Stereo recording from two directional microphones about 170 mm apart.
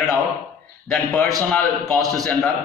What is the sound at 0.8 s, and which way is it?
A man's voice, centre (ahead or behind).